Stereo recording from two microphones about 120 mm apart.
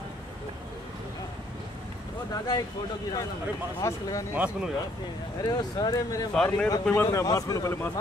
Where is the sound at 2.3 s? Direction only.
35° left (ahead or behind).